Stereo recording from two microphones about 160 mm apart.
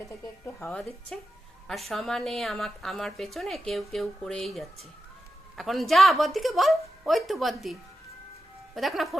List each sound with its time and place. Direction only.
0.4 s speech: 15° left (ahead or behind)
1.1 s a woman's voice: 5° left (ahead or behind)